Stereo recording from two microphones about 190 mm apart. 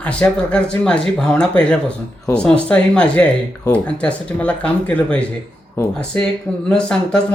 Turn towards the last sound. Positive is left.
turn(degrees=5)  # may be behind; listen again after turning